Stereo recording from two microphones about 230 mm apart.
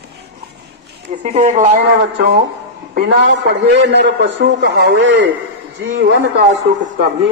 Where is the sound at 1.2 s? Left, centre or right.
Right.